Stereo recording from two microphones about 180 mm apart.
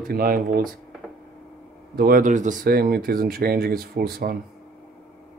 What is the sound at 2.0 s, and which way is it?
Speech, 55° right (ahead or behind).